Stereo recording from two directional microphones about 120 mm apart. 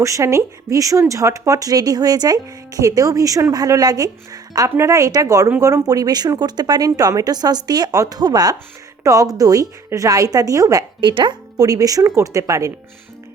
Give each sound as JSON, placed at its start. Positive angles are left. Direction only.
{"t": 0.0, "sound": "speech", "side_deg": -25}